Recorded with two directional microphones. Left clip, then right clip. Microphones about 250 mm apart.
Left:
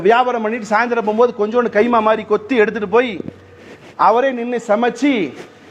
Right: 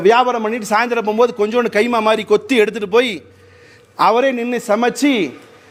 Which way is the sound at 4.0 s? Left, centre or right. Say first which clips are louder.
Even; right.